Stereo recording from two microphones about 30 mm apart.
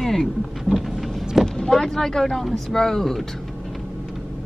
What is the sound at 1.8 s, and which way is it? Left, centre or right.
Speech, centre.